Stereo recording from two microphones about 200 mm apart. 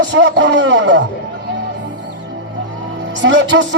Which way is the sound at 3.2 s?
65° right (ahead or behind).